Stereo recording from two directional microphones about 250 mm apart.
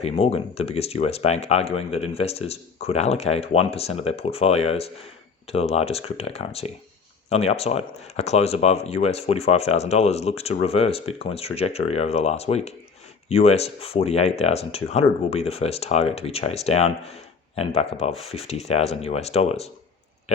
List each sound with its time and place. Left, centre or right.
0.0 s speech: left